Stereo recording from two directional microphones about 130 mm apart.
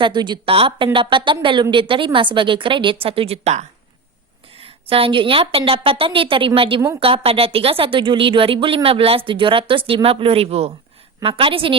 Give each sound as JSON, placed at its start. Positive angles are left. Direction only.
{"t": 0.0, "sound": "a woman's voice", "side_deg": -35}
{"t": 4.6, "sound": "speech", "side_deg": -45}